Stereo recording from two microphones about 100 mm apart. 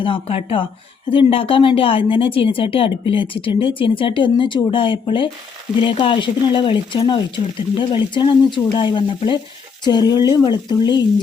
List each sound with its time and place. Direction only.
0.0 s speech: 65° left (ahead or behind); by 11.0 s 45° left (ahead or behind)